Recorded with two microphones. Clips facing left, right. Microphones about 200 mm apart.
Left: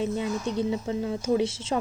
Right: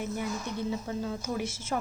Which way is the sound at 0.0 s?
25° left (ahead or behind).